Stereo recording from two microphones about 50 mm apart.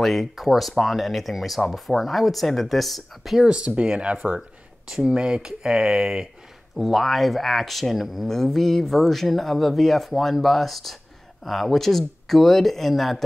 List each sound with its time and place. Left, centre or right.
0.0 s speech: centre
3.3 s speech: centre
6.8 s speech: centre